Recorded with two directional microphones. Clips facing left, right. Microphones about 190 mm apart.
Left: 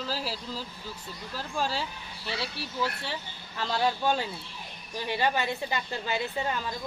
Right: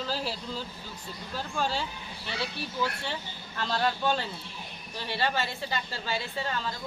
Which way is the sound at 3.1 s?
10° left (ahead or behind).